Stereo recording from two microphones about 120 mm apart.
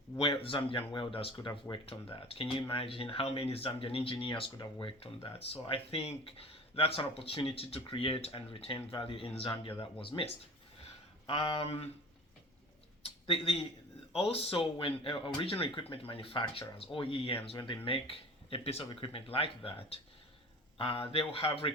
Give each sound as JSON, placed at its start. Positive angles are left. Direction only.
{"t": 0.2, "sound": "speech", "side_deg": 50}
{"t": 13.0, "sound": "a sound", "side_deg": 50}
{"t": 14.2, "sound": "speech", "side_deg": 55}